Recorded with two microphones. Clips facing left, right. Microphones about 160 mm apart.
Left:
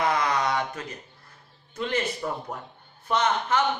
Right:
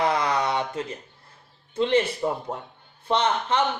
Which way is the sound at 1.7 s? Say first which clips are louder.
Right 6 dB; 30° right (ahead or behind).